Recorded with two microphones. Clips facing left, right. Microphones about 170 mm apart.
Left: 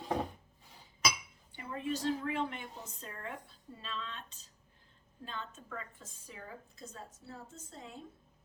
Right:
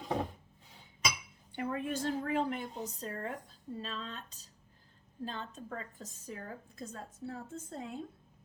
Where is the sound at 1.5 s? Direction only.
55° right (ahead or behind).